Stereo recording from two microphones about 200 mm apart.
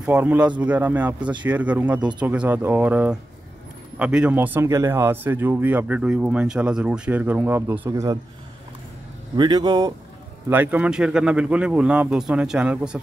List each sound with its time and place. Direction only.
0.0 s speech: 10° right (ahead or behind)
9.4 s speech: 20° right (ahead or behind)
10.5 s a man's voice: 10° right (ahead or behind)